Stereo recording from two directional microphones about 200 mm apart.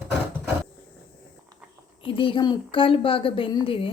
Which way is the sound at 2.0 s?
25° left (ahead or behind).